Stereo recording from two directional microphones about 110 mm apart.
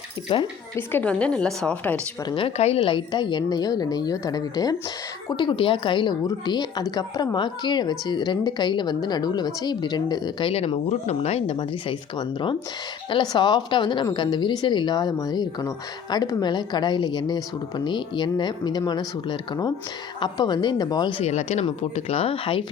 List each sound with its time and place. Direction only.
0.3 s speech: 45° left (ahead or behind)
0.8 s a woman's voice: 15° left (ahead or behind)
2.6 s a woman's voice: 65° left (ahead or behind); by 4.8 s 35° left (ahead or behind)
5.4 s a woman's voice: 50° left (ahead or behind)
10.5 s speech: 70° left (ahead or behind); by 11.9 s 55° left (ahead or behind)
13.1 s a woman's voice: 45° left (ahead or behind)
21.2 s speech: 85° left; by 22.6 s 55° left (ahead or behind)